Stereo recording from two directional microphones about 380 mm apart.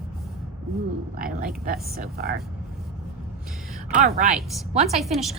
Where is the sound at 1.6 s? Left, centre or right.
Right.